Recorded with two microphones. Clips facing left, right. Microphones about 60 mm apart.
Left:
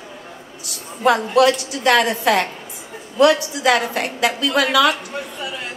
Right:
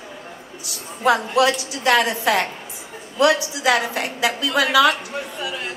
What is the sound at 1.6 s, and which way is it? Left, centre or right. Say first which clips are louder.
A woman's voice: left 2 dB; left.